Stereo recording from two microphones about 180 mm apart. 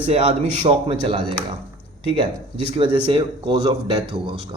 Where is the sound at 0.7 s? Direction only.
30° right (ahead or behind).